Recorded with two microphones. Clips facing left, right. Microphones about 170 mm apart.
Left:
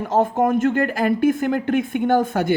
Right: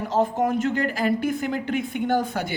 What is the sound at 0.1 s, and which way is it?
Speech, 50° left (ahead or behind).